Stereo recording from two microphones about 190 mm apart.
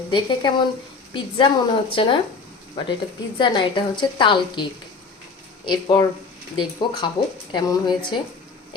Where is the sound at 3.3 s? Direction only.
25° left (ahead or behind).